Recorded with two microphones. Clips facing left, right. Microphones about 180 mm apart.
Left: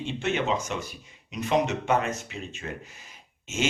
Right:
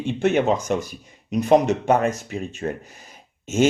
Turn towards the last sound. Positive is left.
turn(degrees=-40)  # may be behind; listen again after turning